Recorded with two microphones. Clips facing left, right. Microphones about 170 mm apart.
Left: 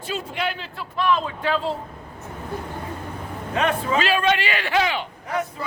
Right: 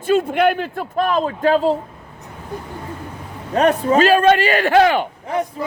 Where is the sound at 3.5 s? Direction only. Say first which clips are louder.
Right 7 dB; 40° right (ahead or behind).